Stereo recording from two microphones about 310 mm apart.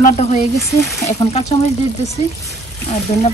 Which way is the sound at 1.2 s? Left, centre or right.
Centre.